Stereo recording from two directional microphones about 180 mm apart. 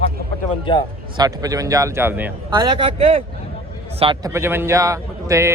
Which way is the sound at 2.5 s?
30° right (ahead or behind).